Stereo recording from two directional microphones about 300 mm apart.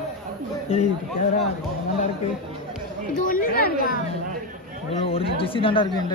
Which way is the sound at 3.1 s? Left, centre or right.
Left.